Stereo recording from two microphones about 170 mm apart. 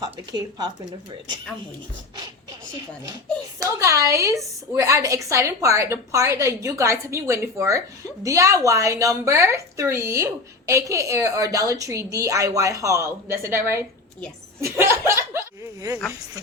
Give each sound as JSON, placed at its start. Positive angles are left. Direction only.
{"t": 0.0, "sound": "speech", "side_deg": -25}
{"t": 3.6, "sound": "a woman's voice", "side_deg": -20}